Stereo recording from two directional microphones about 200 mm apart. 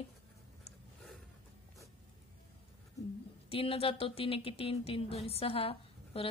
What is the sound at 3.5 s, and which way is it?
A woman's voice, 30° left (ahead or behind).